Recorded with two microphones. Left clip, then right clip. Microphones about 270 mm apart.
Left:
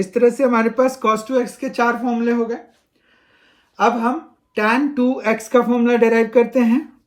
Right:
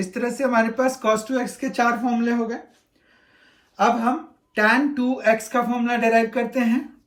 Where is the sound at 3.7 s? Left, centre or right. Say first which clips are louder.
Left 3 dB; centre.